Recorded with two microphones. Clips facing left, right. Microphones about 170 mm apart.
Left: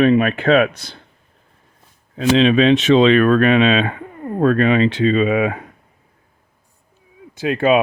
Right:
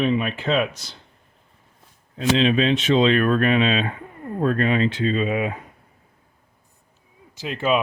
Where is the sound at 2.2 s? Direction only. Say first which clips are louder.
Left 5 dB; 85° left.